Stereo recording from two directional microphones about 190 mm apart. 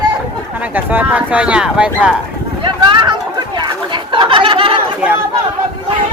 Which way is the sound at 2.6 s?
25° right (ahead or behind).